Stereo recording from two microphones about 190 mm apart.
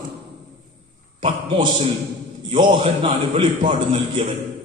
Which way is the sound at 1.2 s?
30° right (ahead or behind).